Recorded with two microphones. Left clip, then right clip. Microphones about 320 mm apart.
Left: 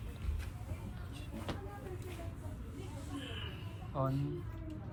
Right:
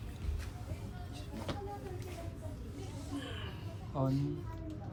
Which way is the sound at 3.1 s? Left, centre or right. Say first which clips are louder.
Right 1 dB; centre.